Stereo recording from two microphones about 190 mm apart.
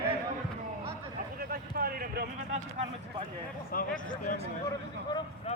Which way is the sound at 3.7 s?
45° left (ahead or behind).